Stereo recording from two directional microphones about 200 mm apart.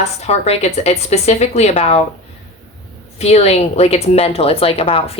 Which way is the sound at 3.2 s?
30° left (ahead or behind).